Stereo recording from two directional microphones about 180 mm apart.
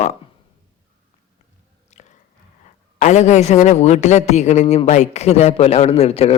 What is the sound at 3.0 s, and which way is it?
A man's voice, 40° left (ahead or behind).